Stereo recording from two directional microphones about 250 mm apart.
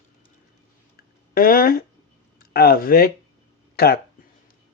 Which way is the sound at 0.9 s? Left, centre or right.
Left.